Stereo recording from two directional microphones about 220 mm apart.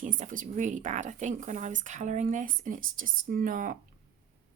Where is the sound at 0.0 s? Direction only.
35° right (ahead or behind).